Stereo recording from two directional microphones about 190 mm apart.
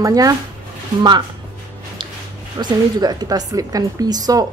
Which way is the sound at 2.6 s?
20° right (ahead or behind).